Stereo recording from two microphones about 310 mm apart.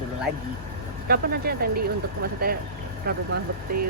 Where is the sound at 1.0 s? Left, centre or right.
Right.